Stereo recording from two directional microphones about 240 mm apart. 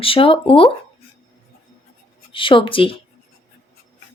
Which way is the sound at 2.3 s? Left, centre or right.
Left.